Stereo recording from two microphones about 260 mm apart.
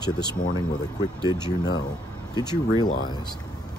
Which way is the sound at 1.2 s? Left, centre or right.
Centre.